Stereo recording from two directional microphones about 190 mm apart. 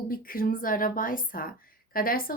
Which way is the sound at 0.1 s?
50° left (ahead or behind).